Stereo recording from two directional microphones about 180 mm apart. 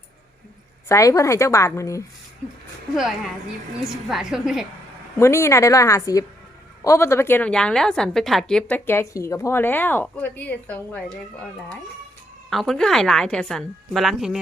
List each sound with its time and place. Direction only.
0.9 s a woman's voice: 15° left (ahead or behind)
2.9 s a woman's voice: centre (ahead or behind)
5.2 s a woman's voice: 15° left (ahead or behind)
12.5 s a woman's voice: centre (ahead or behind)